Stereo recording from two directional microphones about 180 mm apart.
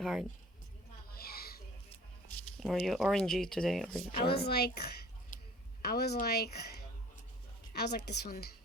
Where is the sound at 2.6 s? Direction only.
Centre (ahead or behind).